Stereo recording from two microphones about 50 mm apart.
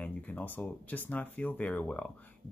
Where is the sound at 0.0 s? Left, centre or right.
Left.